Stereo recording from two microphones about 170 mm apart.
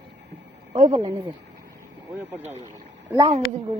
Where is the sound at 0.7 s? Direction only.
30° right (ahead or behind).